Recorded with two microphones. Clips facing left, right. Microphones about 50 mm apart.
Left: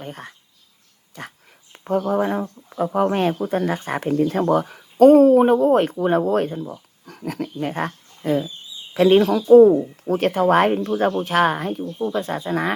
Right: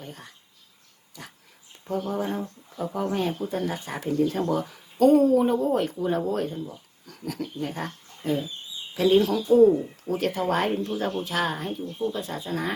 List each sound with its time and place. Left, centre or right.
0.0 s speech: left
11.8 s speech: left